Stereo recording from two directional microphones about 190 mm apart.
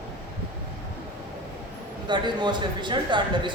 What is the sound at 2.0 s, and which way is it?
Speech, 25° right (ahead or behind).